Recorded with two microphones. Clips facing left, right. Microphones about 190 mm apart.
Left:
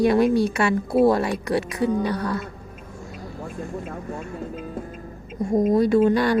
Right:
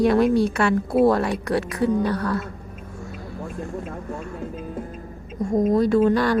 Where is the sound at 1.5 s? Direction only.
20° left (ahead or behind).